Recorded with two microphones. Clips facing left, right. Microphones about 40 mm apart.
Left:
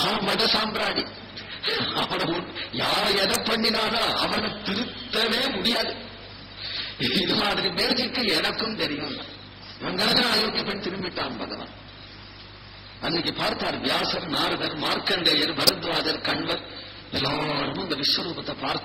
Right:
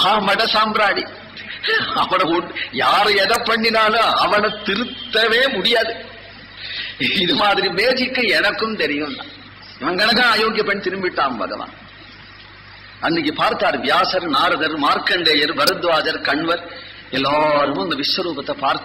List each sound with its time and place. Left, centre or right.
0.0 s a man's voice: right
1.5 s a man's voice: right
6.6 s a man's voice: right
11.3 s a man's voice: right
13.0 s a man's voice: right
14.3 s a man's voice: right